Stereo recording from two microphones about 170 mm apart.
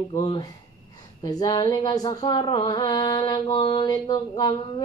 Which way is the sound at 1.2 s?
25° left (ahead or behind).